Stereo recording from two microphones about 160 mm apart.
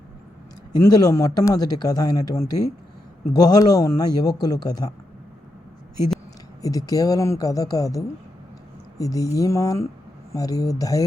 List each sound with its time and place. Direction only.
0.7 s a man's voice: 25° left (ahead or behind)
6.6 s a man's voice: 20° left (ahead or behind)